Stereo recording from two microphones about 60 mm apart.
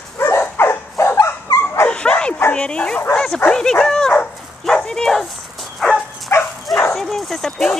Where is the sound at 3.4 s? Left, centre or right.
Centre.